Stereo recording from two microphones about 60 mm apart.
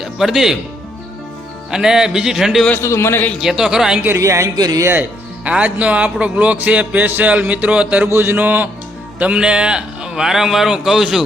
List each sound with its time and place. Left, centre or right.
0.0 s speech: centre
1.7 s a man's voice: centre
2.8 s a man's voice: left
3.4 s a man's voice: centre
4.2 s speech: right
5.5 s speech: right
8.1 s a man's voice: right
8.4 s a man's voice: right; by 11.3 s centre